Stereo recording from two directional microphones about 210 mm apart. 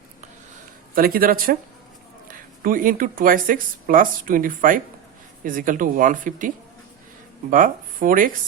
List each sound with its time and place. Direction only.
0.9 s speech: 45° right (ahead or behind)
7.5 s speech: 40° right (ahead or behind)